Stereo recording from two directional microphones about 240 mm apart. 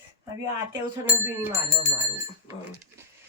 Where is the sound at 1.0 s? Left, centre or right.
Centre.